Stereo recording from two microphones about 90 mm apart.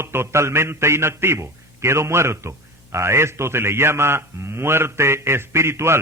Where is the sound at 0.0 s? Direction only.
30° right (ahead or behind).